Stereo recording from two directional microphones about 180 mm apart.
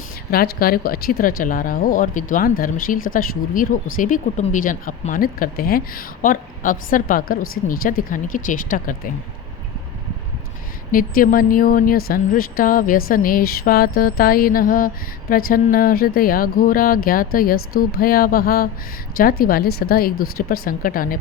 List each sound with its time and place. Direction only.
0.3 s a woman's voice: 55° left (ahead or behind)
10.9 s a woman's voice: 50° left (ahead or behind)